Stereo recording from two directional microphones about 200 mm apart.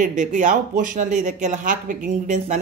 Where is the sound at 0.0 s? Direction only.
40° right (ahead or behind).